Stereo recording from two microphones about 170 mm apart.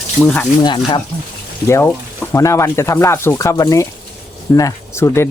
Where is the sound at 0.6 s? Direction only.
25° left (ahead or behind).